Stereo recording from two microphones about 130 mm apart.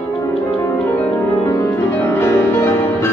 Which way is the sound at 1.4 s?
20° left (ahead or behind).